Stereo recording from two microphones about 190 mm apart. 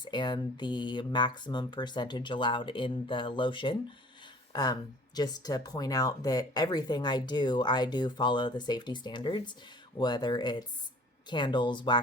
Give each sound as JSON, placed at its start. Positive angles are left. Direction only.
{"t": 0.0, "sound": "speech", "side_deg": 25}